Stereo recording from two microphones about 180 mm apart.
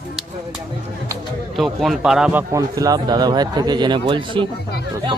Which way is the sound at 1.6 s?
Centre (ahead or behind).